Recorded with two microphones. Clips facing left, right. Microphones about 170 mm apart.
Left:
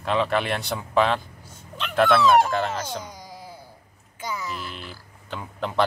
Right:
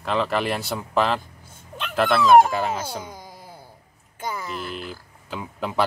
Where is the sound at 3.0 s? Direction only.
50° right (ahead or behind).